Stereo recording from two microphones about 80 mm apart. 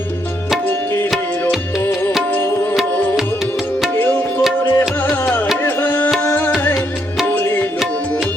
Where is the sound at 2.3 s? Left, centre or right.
Left.